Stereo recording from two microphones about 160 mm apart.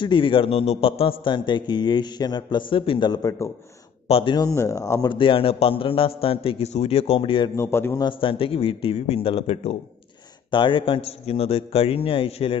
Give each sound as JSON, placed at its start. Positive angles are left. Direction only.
{"t": 0.0, "sound": "a man's voice", "side_deg": 30}
{"t": 4.1, "sound": "a man's voice", "side_deg": 30}
{"t": 5.1, "sound": "a man's voice", "side_deg": 35}
{"t": 7.5, "sound": "a man's voice", "side_deg": 15}
{"t": 8.0, "sound": "a man's voice", "side_deg": 30}